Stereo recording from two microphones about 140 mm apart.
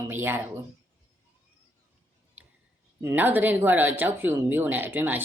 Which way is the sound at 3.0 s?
15° right (ahead or behind).